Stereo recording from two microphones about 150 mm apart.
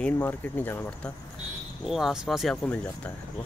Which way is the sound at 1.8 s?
Centre (ahead or behind).